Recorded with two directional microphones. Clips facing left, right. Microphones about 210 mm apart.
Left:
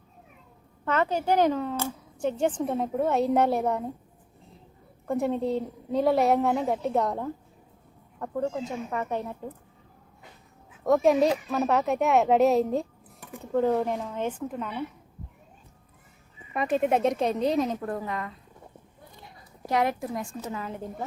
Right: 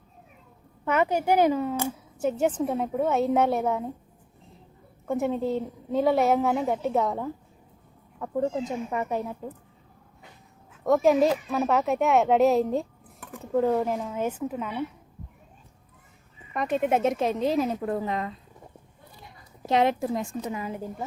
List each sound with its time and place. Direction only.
0.9 s speech: 10° right (ahead or behind)
5.0 s speech: centre (ahead or behind)
8.2 s speech: 10° right (ahead or behind)
10.8 s speech: centre (ahead or behind)
16.5 s speech: centre (ahead or behind)
17.8 s a woman's voice: 25° right (ahead or behind)
19.6 s a woman's voice: 25° right (ahead or behind)
20.4 s speech: 15° right (ahead or behind)